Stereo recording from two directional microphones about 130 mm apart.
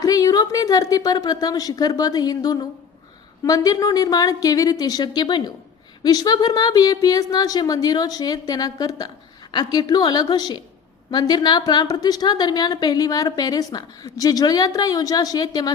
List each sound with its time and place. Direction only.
0.0 s speech: 25° left (ahead or behind)